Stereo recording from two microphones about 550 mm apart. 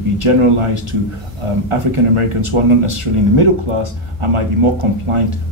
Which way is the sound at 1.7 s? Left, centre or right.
Right.